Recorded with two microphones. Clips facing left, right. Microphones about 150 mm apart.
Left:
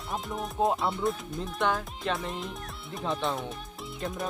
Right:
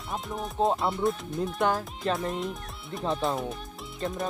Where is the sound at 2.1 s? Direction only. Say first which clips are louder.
Right 4 dB; centre (ahead or behind).